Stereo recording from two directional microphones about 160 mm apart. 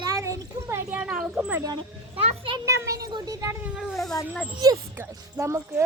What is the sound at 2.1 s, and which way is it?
Speech, 35° right (ahead or behind).